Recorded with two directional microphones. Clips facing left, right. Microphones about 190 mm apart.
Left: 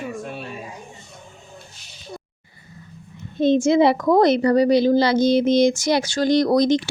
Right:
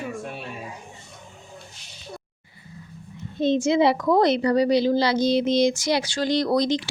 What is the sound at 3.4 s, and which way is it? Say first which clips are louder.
A woman's voice: left 4 dB; 50° left (ahead or behind).